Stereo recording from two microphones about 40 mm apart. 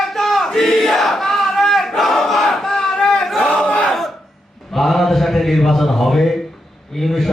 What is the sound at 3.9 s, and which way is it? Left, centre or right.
Cough, centre.